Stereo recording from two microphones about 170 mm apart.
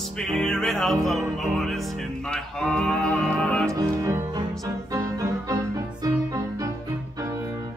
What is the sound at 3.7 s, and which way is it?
Music, 15° right (ahead or behind).